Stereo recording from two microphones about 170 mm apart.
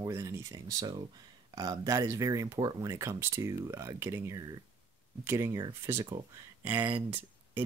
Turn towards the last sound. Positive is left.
turn(degrees=-10)  # may be behind; listen again after turning